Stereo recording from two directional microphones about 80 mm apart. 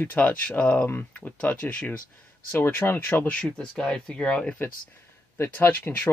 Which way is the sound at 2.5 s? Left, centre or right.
Left.